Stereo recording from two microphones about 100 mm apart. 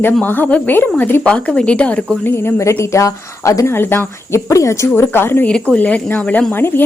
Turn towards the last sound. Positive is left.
turn(degrees=20)  # may be behind; listen again after turning